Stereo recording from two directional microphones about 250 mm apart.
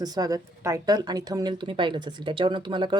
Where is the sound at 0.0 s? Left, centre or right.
Centre.